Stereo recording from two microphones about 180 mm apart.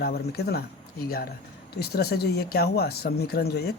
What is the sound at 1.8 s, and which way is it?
Speech, 60° left (ahead or behind).